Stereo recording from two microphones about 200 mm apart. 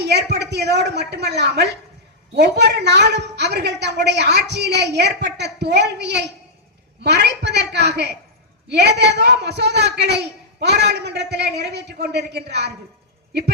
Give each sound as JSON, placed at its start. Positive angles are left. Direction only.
{"t": 0.0, "sound": "a man's voice", "side_deg": -55}